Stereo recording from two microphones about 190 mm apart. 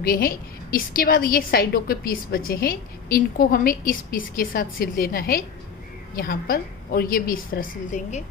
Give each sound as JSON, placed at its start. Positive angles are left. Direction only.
{"t": 0.0, "sound": "a woman's voice", "side_deg": 50}